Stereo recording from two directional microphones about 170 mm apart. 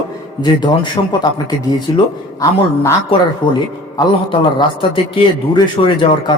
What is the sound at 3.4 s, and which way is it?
Speech, 30° left (ahead or behind).